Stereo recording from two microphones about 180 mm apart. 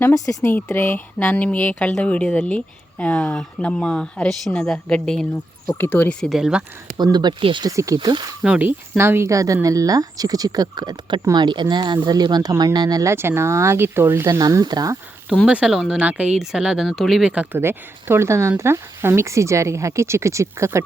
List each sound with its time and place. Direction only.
0.0 s speech: 15° left (ahead or behind); by 6.7 s 5° right (ahead or behind)
6.9 s speech: 25° right (ahead or behind)
8.4 s speech: 5° right (ahead or behind)
15.4 s speech: 5° right (ahead or behind)